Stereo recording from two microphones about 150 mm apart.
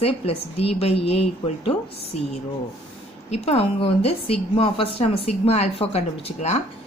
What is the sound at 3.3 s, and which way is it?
A woman's voice, 45° left (ahead or behind).